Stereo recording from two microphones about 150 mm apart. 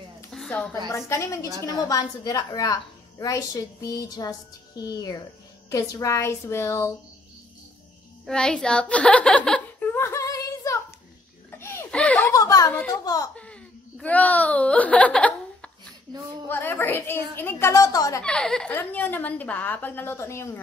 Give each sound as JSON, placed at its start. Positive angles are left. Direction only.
{"t": 0.3, "sound": "a sound", "side_deg": 5}
{"t": 0.9, "sound": "a woman's voice", "side_deg": 20}
{"t": 8.3, "sound": "a sound", "side_deg": 5}
{"t": 11.5, "sound": "giggle", "side_deg": 15}
{"t": 12.4, "sound": "a sound", "side_deg": 25}
{"t": 12.7, "sound": "speech", "side_deg": 20}
{"t": 13.4, "sound": "wail", "side_deg": 10}
{"t": 16.4, "sound": "a woman's voice", "side_deg": 15}
{"t": 18.2, "sound": "a woman's voice", "side_deg": 5}